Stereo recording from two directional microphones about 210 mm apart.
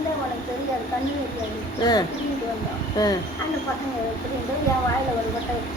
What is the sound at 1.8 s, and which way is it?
Speech, 20° left (ahead or behind).